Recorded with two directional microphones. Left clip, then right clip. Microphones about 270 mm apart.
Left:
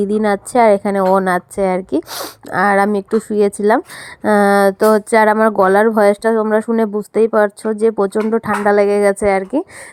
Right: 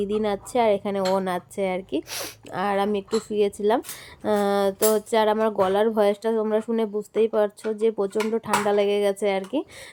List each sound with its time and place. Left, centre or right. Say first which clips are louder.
0.0 s speech: left 9 dB; left
8.7 s speech: left 10 dB; centre
9.0 s speech: left 9 dB; left